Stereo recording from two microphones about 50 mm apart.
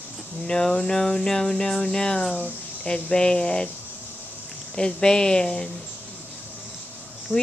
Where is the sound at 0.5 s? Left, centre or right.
Centre.